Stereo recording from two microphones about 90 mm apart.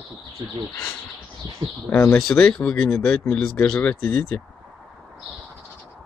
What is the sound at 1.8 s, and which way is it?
Speech, 20° left (ahead or behind).